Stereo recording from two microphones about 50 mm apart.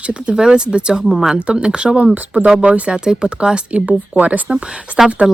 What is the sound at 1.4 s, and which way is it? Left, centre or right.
Speech, right.